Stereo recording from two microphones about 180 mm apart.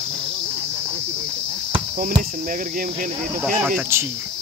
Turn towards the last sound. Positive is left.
turn(degrees=-5)  # may be behind; listen again after turning